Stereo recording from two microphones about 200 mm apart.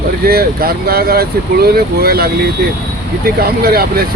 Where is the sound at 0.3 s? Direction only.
50° right (ahead or behind).